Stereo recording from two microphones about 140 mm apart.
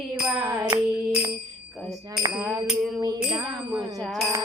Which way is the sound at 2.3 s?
Centre (ahead or behind).